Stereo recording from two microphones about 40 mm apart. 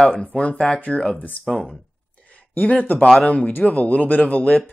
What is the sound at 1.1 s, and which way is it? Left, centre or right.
Speech, left.